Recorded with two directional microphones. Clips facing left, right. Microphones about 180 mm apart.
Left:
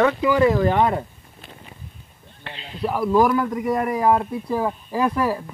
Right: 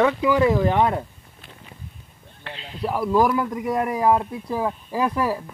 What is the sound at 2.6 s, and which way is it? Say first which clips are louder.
Speech: left 1 dB; centre (ahead or behind).